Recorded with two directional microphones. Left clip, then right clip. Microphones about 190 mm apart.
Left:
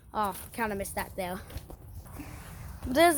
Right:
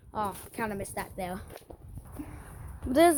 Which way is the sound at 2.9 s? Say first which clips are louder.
Right 1 dB; 20° right (ahead or behind).